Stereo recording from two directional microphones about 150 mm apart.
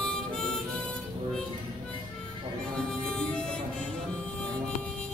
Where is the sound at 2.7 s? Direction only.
5° left (ahead or behind).